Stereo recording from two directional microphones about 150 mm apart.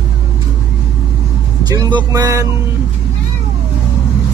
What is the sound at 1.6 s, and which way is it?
Speech, 30° right (ahead or behind).